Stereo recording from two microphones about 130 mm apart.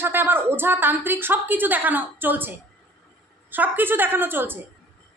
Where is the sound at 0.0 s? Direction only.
15° right (ahead or behind).